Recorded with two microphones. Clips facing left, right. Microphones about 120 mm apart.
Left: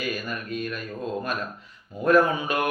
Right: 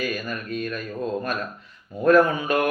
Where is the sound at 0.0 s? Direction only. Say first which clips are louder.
Right 2 dB; 25° left (ahead or behind).